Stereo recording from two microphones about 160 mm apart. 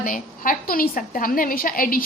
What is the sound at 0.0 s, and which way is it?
A woman's voice, 60° left (ahead or behind).